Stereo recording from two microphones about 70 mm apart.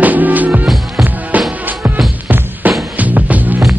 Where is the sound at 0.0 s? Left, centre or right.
Right.